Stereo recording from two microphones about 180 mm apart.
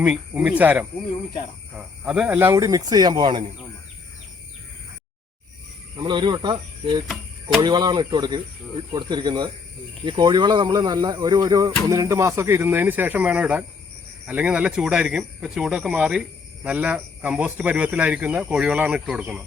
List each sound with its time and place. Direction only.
0.0 s speech: 5° right (ahead or behind); by 3.4 s 25° right (ahead or behind)
6.0 s speech: 25° right (ahead or behind); by 19.4 s 5° right (ahead or behind)